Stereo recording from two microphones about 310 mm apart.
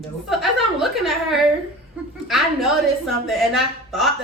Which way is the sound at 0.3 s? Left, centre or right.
Centre.